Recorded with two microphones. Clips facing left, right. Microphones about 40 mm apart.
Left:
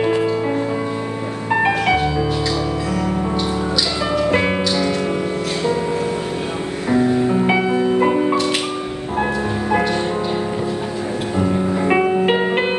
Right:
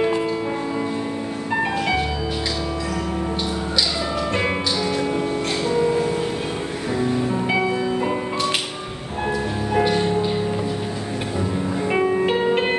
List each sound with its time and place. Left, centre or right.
0.0 s music: centre
6.9 s music: left
11.9 s music: left